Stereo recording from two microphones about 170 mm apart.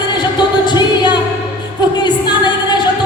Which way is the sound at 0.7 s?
25° left (ahead or behind).